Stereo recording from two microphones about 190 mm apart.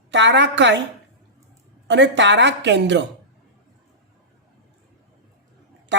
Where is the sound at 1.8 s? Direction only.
70° right (ahead or behind).